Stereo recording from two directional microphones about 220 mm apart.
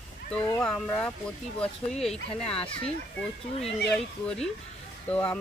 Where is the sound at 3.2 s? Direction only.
5° left (ahead or behind).